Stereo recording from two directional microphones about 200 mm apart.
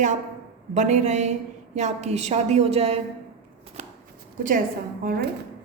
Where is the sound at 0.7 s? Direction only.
35° right (ahead or behind).